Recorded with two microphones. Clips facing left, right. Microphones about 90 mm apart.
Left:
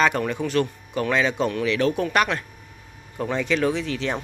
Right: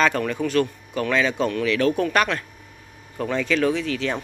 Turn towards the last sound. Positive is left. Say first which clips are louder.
# right 1 dB
turn(degrees=25)  # may be behind; listen again after turning